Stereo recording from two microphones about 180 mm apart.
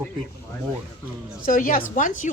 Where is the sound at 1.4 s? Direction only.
50° left (ahead or behind).